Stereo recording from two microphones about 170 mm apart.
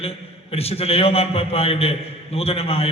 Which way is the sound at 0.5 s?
35° left (ahead or behind).